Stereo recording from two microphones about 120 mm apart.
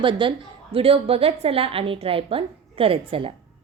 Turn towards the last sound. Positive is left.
turn(degrees=-50)  # may be behind; listen again after turning